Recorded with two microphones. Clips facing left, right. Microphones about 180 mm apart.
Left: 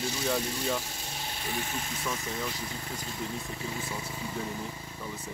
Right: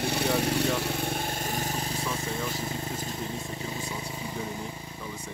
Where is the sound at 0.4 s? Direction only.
70° right (ahead or behind); by 3.1 s 30° right (ahead or behind).